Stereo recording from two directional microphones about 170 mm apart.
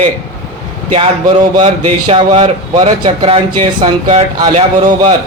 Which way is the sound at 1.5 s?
30° right (ahead or behind).